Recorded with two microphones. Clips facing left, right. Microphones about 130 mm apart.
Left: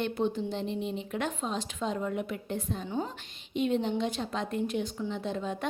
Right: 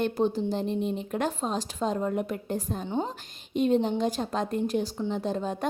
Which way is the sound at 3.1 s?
40° right (ahead or behind).